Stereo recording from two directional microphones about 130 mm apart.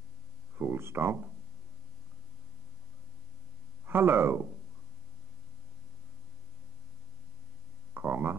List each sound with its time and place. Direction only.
0.6 s speech: 15° right (ahead or behind)
3.8 s speech: 15° right (ahead or behind)
7.9 s a sound: 15° right (ahead or behind)